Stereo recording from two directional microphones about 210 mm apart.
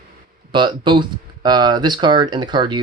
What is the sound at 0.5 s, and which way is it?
Speech, 20° right (ahead or behind).